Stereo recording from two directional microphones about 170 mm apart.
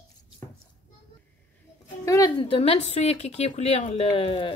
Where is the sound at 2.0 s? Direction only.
20° left (ahead or behind).